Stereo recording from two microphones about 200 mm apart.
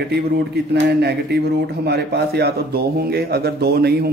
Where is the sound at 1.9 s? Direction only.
55° right (ahead or behind).